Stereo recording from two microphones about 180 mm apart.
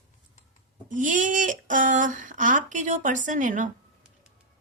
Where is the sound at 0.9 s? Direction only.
45° right (ahead or behind).